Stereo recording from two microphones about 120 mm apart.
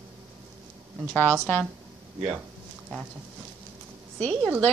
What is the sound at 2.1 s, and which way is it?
Speech, 10° right (ahead or behind).